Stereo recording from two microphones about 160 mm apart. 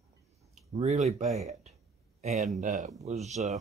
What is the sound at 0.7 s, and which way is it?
Speech, 40° right (ahead or behind).